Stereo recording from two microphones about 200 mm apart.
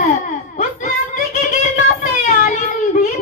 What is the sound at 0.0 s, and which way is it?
Baby cry, 40° left (ahead or behind).